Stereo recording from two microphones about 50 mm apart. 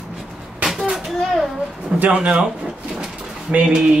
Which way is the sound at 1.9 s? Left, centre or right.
Right.